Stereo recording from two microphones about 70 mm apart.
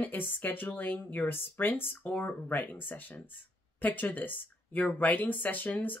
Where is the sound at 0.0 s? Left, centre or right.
Left.